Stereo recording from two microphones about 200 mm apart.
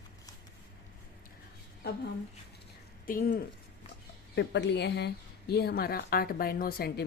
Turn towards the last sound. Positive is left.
turn(degrees=50)  # may be behind; listen again after turning